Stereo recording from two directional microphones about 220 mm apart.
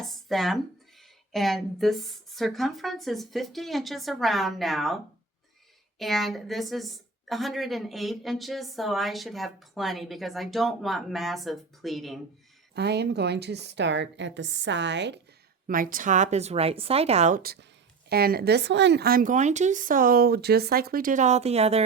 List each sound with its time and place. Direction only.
0.0 s a sound: centre (ahead or behind)
1.3 s a woman's voice: centre (ahead or behind)
6.0 s a woman's voice: centre (ahead or behind)
12.7 s a woman's voice: 50° right (ahead or behind)
15.6 s speech: 40° right (ahead or behind)